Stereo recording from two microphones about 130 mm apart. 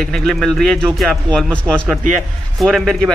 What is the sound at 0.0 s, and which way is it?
Speech, 5° left (ahead or behind).